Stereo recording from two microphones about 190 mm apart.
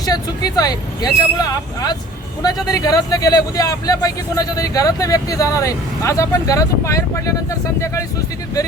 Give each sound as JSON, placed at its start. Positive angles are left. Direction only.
{"t": 0.0, "sound": "speech", "side_deg": 20}